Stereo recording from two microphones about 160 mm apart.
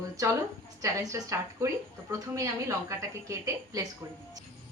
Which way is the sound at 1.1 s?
20° right (ahead or behind).